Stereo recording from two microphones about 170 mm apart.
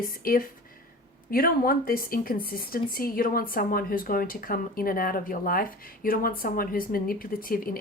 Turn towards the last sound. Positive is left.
turn(degrees=55)  # may be behind; listen again after turning